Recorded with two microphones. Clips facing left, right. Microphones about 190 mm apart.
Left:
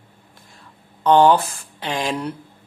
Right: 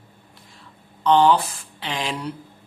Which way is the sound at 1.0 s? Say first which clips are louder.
Left 3 dB; 45° left (ahead or behind).